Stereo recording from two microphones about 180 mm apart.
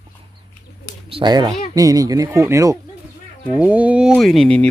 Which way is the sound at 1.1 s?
25° right (ahead or behind).